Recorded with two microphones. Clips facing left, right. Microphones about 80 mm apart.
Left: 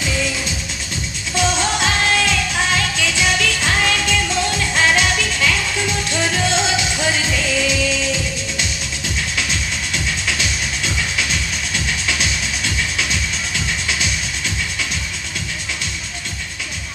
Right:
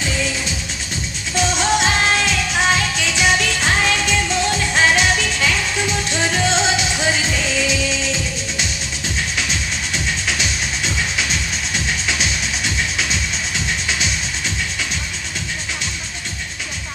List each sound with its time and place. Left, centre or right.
1.4 s music: right
9.5 s music: right
11.7 s music: right